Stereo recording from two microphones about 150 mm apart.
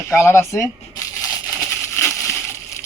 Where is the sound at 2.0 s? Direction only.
20° left (ahead or behind).